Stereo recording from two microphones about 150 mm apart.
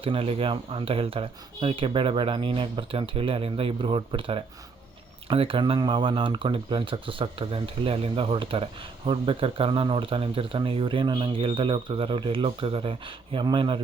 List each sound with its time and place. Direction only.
0.0 s speech: 40° right (ahead or behind)